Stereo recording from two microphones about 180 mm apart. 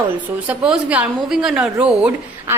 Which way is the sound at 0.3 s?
5° right (ahead or behind).